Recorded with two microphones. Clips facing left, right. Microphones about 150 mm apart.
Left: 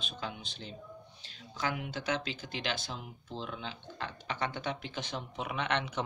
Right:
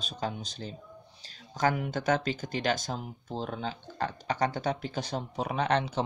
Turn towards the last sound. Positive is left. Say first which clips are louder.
# right 6 dB
turn(degrees=-35)  # may be behind; listen again after turning